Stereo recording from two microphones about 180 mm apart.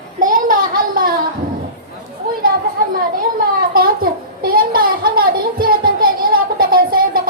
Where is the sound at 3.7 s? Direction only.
55° right (ahead or behind).